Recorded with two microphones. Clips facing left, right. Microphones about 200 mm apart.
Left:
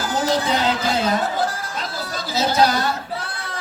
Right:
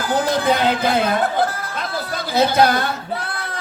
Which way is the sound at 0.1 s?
55° right (ahead or behind).